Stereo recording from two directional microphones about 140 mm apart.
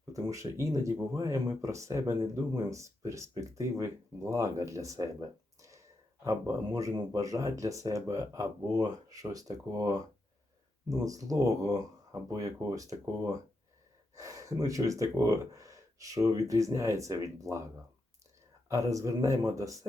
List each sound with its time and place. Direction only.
0.1 s speech: 20° right (ahead or behind)
5.5 s a sound: 20° right (ahead or behind)
6.2 s speech: 25° right (ahead or behind)
18.7 s speech: 25° right (ahead or behind)